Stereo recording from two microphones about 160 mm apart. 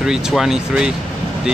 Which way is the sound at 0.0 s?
5° right (ahead or behind).